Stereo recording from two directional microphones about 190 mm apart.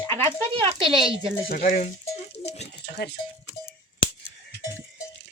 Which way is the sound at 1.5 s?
50° left (ahead or behind).